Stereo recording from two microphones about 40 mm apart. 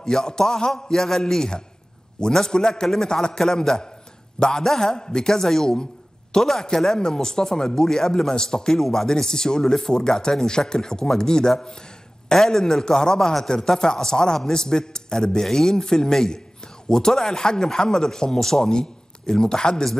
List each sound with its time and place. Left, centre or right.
0.0 s a man's voice: centre